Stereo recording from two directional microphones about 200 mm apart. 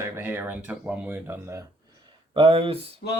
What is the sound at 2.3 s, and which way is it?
Speech, 25° right (ahead or behind).